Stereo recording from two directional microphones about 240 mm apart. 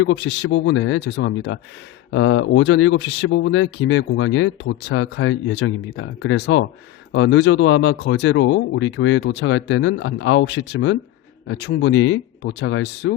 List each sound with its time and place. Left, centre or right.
0.0 s speech: left